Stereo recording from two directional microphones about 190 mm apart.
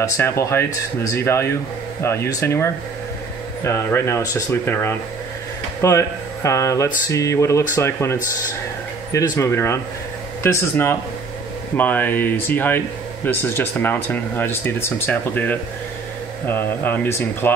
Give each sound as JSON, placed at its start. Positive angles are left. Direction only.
{"t": 0.0, "sound": "speech", "side_deg": 15}